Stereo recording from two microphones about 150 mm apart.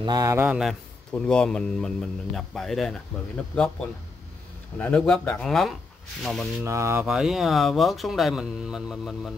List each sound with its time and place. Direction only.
0.0 s speech: 25° right (ahead or behind)
0.6 s a man's voice: centre (ahead or behind)
4.7 s a man's voice: 10° left (ahead or behind)
6.6 s mantra: 20° right (ahead or behind)
7.1 s a man's voice: 5° right (ahead or behind)